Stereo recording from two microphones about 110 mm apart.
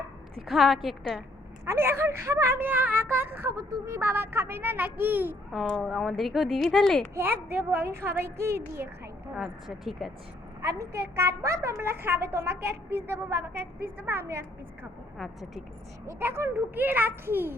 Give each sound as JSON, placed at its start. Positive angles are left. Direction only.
{"t": 0.3, "sound": "speech", "side_deg": 0}
{"t": 1.6, "sound": "a woman's voice", "side_deg": -25}
{"t": 5.7, "sound": "speech", "side_deg": 0}
{"t": 7.2, "sound": "a woman's voice", "side_deg": -20}
{"t": 9.3, "sound": "speech", "side_deg": -5}
{"t": 10.6, "sound": "a woman's voice", "side_deg": -25}
{"t": 15.2, "sound": "speech", "side_deg": -5}
{"t": 16.0, "sound": "a woman's voice", "side_deg": -25}